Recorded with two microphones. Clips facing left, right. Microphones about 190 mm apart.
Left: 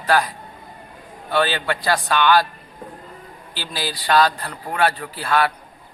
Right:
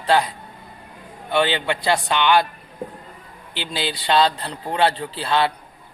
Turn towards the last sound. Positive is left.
turn(degrees=-25)  # may be behind; listen again after turning